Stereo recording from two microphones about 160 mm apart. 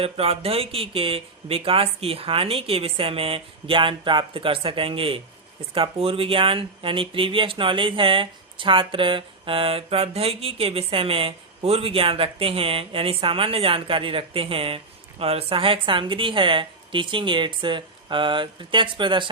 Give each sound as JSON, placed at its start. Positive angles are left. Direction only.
{"t": 0.0, "sound": "speech", "side_deg": -35}